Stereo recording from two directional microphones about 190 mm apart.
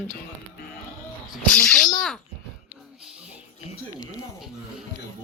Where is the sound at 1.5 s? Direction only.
5° left (ahead or behind).